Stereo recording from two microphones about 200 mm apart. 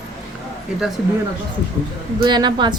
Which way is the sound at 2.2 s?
20° right (ahead or behind).